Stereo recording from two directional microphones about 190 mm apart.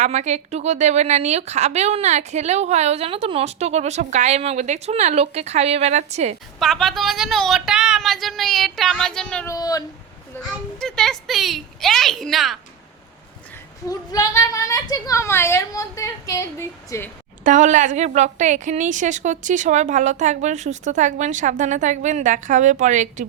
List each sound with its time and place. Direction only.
0.0 s speech: 40° right (ahead or behind)
6.6 s speech: centre (ahead or behind)
9.5 s speech: 20° left (ahead or behind)
10.8 s speech: 5° left (ahead or behind)
13.8 s a woman's voice: 20° left (ahead or behind)
17.4 s speech: 40° right (ahead or behind)